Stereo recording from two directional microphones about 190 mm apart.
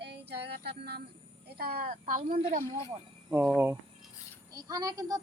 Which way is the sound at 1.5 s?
55° right (ahead or behind).